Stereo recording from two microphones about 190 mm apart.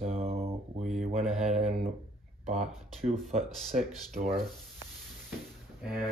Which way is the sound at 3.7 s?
45° right (ahead or behind).